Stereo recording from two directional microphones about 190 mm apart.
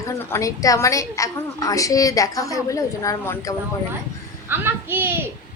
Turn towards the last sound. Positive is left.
turn(degrees=-10)  # may be behind; listen again after turning